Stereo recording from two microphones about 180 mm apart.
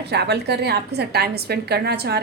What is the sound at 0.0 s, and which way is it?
A woman's voice, 65° right (ahead or behind).